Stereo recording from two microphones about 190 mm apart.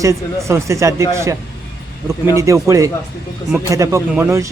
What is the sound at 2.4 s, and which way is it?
A man's voice, 15° right (ahead or behind).